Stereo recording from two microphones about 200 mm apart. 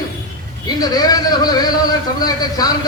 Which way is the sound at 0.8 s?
20° left (ahead or behind).